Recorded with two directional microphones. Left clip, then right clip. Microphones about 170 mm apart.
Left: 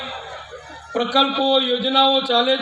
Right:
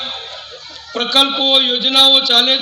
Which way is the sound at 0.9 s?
40° left (ahead or behind).